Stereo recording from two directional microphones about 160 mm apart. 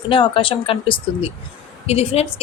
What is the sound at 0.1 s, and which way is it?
A woman's voice, 35° left (ahead or behind).